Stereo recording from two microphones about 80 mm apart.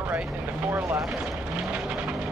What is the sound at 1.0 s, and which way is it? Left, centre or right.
Speech, centre.